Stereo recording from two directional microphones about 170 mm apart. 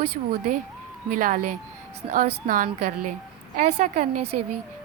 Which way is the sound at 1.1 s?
50° right (ahead or behind).